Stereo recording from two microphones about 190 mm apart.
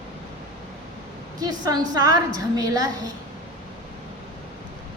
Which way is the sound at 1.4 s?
20° right (ahead or behind).